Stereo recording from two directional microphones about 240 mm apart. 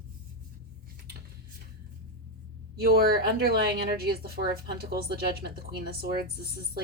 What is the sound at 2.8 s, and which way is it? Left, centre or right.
Speech, right.